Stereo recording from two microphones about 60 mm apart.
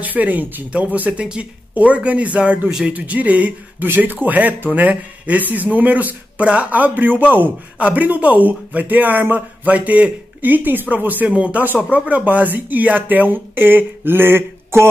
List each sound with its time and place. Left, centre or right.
0.0 s speech: right